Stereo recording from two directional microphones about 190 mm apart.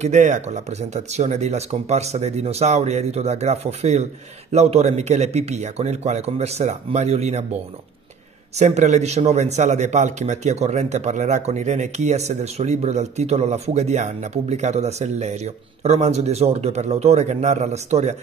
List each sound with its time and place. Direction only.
0.0 s a man's voice: 40° right (ahead or behind)
8.5 s a man's voice: 40° right (ahead or behind)